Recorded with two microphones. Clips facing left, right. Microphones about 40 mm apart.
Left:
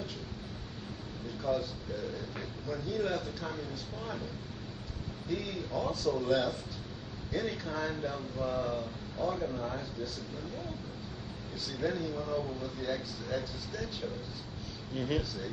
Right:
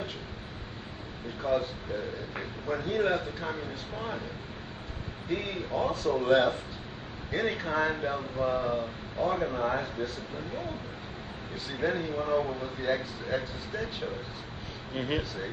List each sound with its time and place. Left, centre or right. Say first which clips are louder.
1.4 s speech: right 4 dB; right
5.3 s speech: right 4 dB; right